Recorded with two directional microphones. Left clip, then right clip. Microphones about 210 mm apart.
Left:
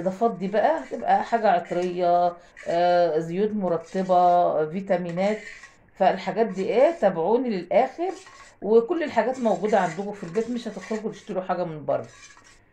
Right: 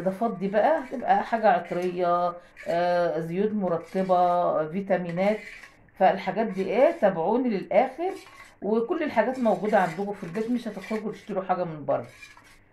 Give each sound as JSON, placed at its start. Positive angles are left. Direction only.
{"t": 0.2, "sound": "speech", "side_deg": 35}